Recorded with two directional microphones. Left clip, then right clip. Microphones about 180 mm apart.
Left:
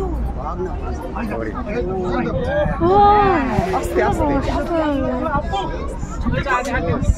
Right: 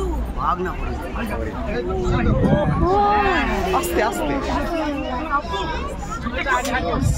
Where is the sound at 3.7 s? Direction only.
25° left (ahead or behind).